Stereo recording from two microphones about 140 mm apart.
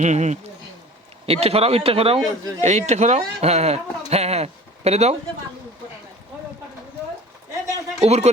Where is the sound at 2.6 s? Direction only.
55° right (ahead or behind).